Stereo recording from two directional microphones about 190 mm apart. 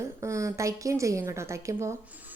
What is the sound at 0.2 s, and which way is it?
Speech, 15° right (ahead or behind).